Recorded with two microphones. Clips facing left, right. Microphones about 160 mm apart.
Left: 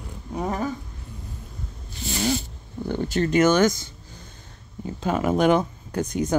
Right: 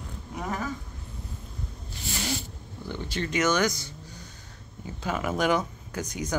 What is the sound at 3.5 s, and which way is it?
Speech, 25° left (ahead or behind).